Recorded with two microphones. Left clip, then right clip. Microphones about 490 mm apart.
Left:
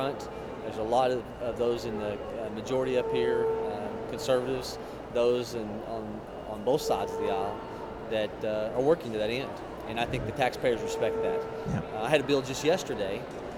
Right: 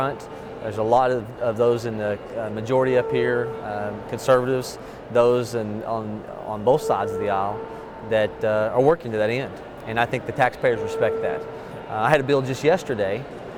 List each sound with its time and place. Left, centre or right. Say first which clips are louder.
0.9 s speech: right 7 dB; right
6.7 s speech: right 8 dB; right